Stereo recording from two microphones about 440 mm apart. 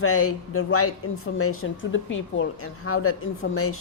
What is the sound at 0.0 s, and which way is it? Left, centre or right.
Speech, left.